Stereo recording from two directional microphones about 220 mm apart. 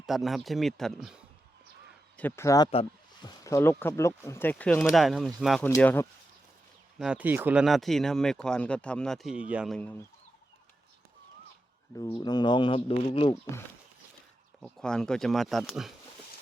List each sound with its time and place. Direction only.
0.0 s speech: centre (ahead or behind)
2.1 s speech: 10° left (ahead or behind)
7.0 s speech: 5° right (ahead or behind)
11.9 s speech: 15° left (ahead or behind)
14.6 s speech: 5° left (ahead or behind)